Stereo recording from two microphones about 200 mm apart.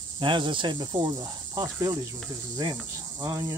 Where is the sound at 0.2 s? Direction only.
25° right (ahead or behind).